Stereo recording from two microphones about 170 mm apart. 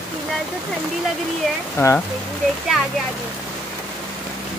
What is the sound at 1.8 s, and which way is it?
Speech, 15° left (ahead or behind).